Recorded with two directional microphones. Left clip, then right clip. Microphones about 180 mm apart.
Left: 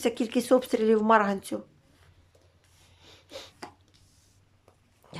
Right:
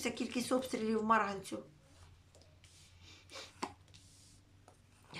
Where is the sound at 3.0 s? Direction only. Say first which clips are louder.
Left 7 dB; 45° left (ahead or behind).